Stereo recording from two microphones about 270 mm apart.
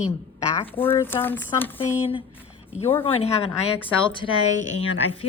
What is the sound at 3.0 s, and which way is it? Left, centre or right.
A woman's voice, left.